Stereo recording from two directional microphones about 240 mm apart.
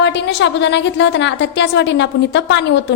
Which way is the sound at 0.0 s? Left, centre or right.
Left.